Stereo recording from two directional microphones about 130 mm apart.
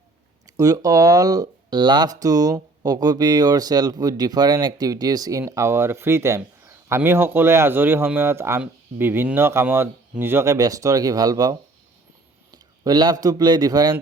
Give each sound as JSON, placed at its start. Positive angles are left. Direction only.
{"t": 0.4, "sound": "speech", "side_deg": -25}
{"t": 12.8, "sound": "a man's voice", "side_deg": -35}